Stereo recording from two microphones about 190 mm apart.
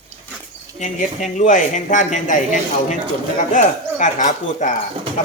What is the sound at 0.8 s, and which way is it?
Speech, 40° left (ahead or behind).